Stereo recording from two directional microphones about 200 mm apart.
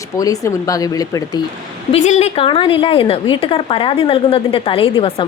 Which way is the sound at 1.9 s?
35° left (ahead or behind).